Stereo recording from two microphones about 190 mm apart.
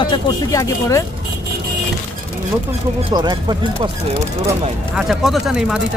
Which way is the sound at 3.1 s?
20° right (ahead or behind).